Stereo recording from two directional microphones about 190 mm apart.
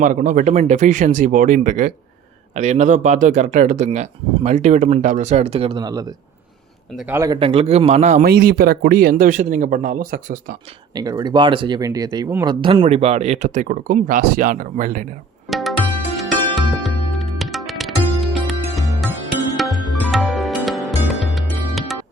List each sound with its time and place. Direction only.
0.0 s a man's voice: 45° right (ahead or behind); by 7.3 s 15° right (ahead or behind)
7.3 s speech: 30° right (ahead or behind)
8.2 s speech: 55° right (ahead or behind)
10.9 s speech: 20° right (ahead or behind)
12.6 s speech: 30° right (ahead or behind); by 15.0 s 45° right (ahead or behind)
15.4 s music: centre (ahead or behind)